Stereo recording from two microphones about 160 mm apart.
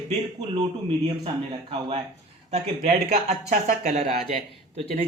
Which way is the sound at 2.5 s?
45° right (ahead or behind).